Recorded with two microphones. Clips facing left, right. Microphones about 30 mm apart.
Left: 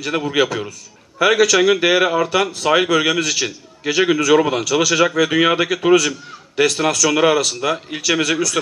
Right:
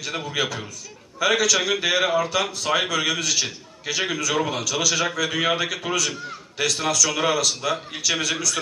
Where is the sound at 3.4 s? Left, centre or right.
Left.